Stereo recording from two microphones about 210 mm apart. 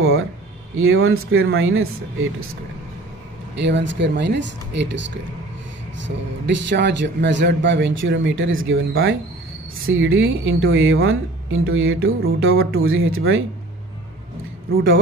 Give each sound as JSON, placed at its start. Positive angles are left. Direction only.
{"t": 0.7, "sound": "speech", "side_deg": -75}
{"t": 3.5, "sound": "speech", "side_deg": -60}